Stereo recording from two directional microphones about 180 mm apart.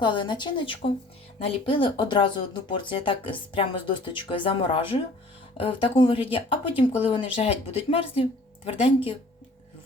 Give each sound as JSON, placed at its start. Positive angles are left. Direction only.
{"t": 0.0, "sound": "speech", "side_deg": 25}